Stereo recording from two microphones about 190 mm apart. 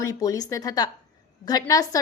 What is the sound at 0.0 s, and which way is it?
A woman's voice, 20° left (ahead or behind).